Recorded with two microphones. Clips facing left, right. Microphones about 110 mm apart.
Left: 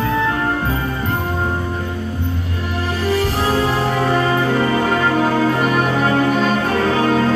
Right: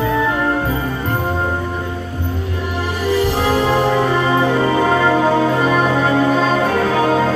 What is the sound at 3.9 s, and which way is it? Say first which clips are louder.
Music: right 1 dB; 25° right (ahead or behind).